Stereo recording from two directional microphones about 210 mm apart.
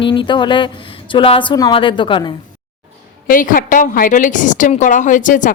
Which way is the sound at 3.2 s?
40° left (ahead or behind).